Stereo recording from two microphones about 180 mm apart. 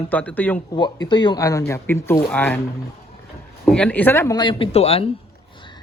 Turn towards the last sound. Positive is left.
turn(degrees=35)  # may be behind; listen again after turning